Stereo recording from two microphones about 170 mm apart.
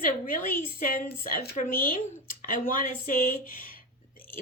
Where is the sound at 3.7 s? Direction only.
55° left (ahead or behind).